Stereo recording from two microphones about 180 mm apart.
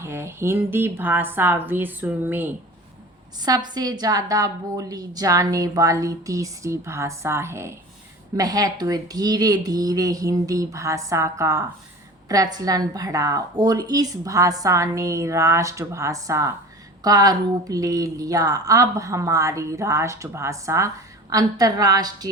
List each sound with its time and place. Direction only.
0.0 s a woman's voice: 15° right (ahead or behind)
3.4 s a woman's voice: 20° right (ahead or behind)